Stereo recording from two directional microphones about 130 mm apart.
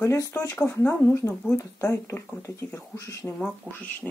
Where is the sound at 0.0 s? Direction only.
20° left (ahead or behind).